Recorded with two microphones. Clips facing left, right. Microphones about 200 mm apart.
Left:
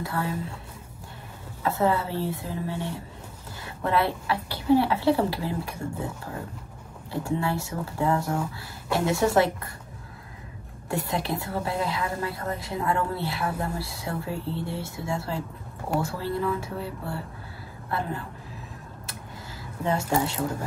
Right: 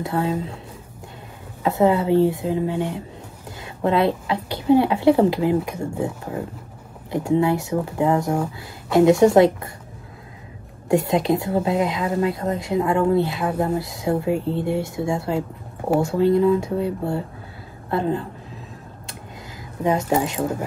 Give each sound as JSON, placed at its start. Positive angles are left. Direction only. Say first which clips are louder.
{"t": 0.0, "sound": "a woman's voice", "louder": "right 7 dB", "side_deg": -25}
{"t": 1.6, "sound": "a woman's voice", "louder": "right 6 dB", "side_deg": -20}
{"t": 7.1, "sound": "a woman's voice", "louder": "right 8 dB", "side_deg": -20}
{"t": 10.9, "sound": "a woman's voice", "louder": "right 10 dB", "side_deg": -20}
{"t": 19.8, "sound": "a woman's voice", "louder": "right 5 dB", "side_deg": -20}